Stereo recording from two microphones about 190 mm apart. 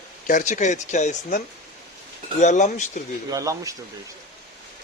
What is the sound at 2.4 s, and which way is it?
Speech, 40° left (ahead or behind).